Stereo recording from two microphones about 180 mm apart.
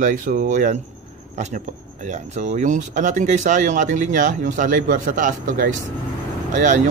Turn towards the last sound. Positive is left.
turn(degrees=-45)  # may be behind; listen again after turning